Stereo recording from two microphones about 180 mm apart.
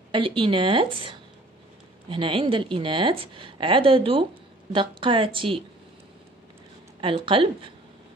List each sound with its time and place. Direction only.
0.1 s a woman's voice: 30° right (ahead or behind)
7.0 s a woman's voice: 30° right (ahead or behind)